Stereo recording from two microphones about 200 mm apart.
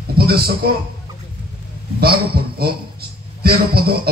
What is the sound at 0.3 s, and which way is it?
Speech, 50° right (ahead or behind).